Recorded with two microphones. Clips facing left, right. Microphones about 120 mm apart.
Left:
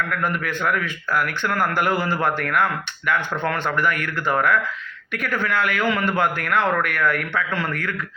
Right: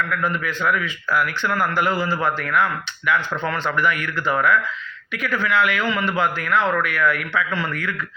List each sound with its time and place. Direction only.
0.2 s a man's voice: 55° left (ahead or behind)